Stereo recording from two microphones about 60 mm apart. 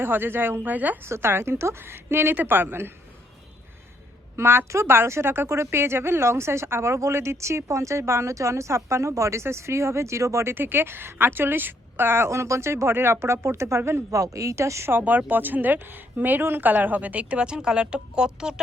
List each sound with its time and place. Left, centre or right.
0.0 s speech: right
1.0 s speech: right
4.4 s a woman's voice: right
10.5 s speech: right
14.1 s speech: right
14.8 s a woman's voice: right; by 18.6 s centre